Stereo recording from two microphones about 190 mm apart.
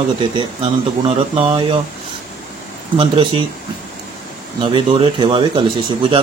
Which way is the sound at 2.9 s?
25° right (ahead or behind).